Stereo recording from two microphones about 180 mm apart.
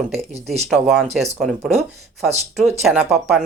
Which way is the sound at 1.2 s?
5° right (ahead or behind).